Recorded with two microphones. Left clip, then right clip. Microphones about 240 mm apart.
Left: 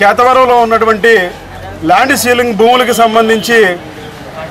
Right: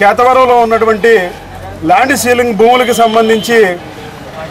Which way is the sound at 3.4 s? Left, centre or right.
Centre.